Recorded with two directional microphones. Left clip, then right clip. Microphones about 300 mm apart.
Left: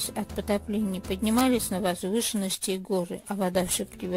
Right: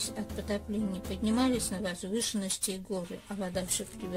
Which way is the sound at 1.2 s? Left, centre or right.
Left.